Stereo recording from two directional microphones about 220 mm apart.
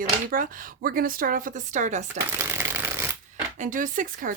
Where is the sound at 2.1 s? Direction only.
10° right (ahead or behind).